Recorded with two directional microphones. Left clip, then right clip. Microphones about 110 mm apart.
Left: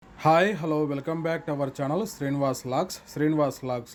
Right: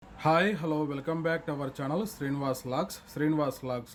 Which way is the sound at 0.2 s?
45° left (ahead or behind).